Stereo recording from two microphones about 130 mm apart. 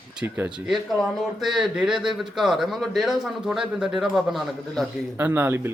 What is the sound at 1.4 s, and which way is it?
A man's voice, centre (ahead or behind).